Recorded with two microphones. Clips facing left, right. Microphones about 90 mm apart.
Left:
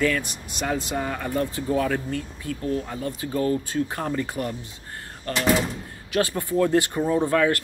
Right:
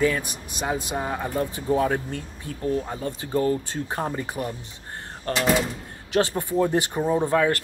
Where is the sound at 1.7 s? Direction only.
30° right (ahead or behind).